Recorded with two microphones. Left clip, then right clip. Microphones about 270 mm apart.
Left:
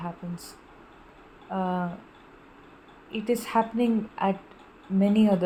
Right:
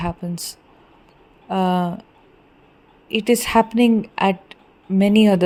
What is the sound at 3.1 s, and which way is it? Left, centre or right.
Speech, right.